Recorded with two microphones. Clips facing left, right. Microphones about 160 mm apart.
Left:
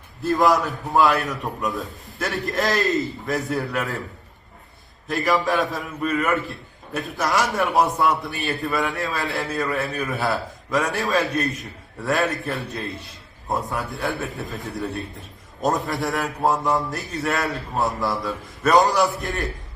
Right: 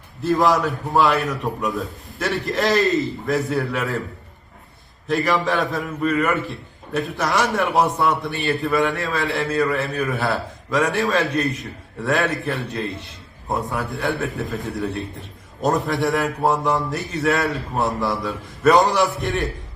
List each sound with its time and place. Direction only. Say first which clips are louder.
0.2 s a man's voice: right 1 dB; centre (ahead or behind)
5.0 s a man's voice: right 1 dB; centre (ahead or behind)